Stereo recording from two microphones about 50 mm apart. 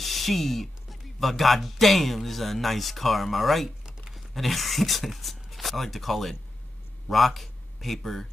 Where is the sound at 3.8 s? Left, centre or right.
Centre.